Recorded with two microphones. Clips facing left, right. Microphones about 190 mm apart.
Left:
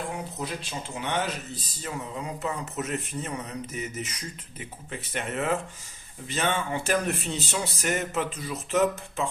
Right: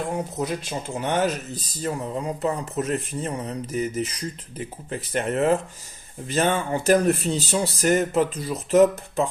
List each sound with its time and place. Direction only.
0.3 s speech: 45° right (ahead or behind)